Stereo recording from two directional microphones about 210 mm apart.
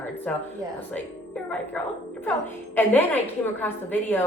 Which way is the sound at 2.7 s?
10° left (ahead or behind).